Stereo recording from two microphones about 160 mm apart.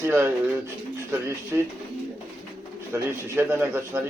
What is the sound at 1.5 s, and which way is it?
Speech, 20° right (ahead or behind).